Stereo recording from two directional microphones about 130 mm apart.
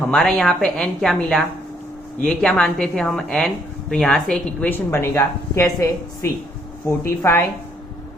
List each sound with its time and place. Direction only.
0.0 s a woman's voice: 5° left (ahead or behind)